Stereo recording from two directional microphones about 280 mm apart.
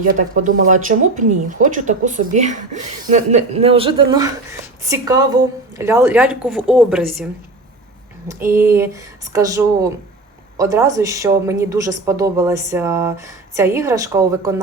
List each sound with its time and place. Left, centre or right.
0.2 s a woman's voice: right; by 7.3 s centre
8.3 s speech: centre